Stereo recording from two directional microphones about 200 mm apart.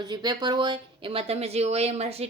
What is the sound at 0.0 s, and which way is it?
A woman's voice, 20° right (ahead or behind).